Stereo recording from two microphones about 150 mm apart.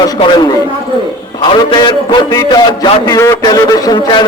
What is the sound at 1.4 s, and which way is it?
A man's voice, 35° left (ahead or behind).